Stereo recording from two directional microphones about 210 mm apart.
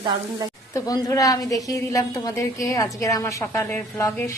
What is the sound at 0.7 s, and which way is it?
A woman's voice, 15° left (ahead or behind).